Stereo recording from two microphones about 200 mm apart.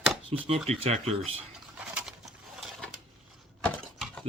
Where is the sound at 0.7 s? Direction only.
30° right (ahead or behind).